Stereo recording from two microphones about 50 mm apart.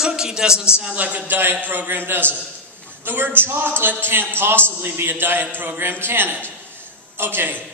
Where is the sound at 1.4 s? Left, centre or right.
Right.